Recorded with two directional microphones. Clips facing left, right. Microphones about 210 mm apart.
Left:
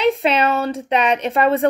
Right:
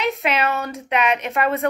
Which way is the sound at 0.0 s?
30° left (ahead or behind).